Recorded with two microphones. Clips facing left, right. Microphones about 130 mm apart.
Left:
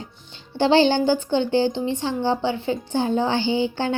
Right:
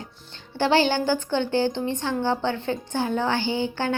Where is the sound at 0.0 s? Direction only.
15° left (ahead or behind).